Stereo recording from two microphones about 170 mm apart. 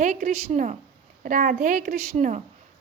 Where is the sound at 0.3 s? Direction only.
40° right (ahead or behind).